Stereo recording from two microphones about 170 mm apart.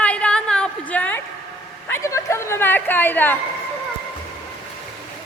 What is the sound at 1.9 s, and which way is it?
A woman's voice, 20° left (ahead or behind).